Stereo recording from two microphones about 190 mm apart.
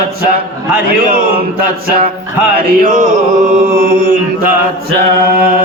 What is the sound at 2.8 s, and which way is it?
Music, 40° right (ahead or behind).